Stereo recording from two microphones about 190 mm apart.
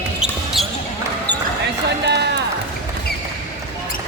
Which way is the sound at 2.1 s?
60° right (ahead or behind).